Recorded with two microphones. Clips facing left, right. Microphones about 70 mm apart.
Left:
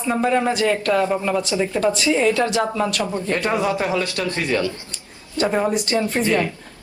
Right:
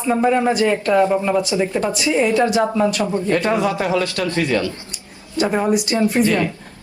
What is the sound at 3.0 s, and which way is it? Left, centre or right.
Speech, right.